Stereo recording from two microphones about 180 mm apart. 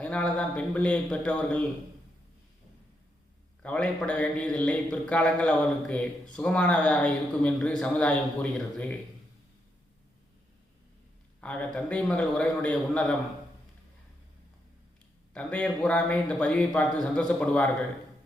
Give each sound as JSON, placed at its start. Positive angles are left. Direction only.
{"t": 0.0, "sound": "a man's voice", "side_deg": 5}
{"t": 3.6, "sound": "a man's voice", "side_deg": 5}
{"t": 11.3, "sound": "a man's voice", "side_deg": 5}
{"t": 15.3, "sound": "a man's voice", "side_deg": 5}